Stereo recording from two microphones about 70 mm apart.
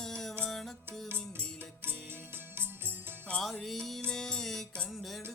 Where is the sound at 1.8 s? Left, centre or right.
Right.